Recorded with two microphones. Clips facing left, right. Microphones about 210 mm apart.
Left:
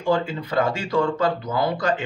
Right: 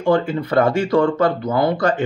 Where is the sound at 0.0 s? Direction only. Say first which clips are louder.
Right 5 dB; 60° right (ahead or behind).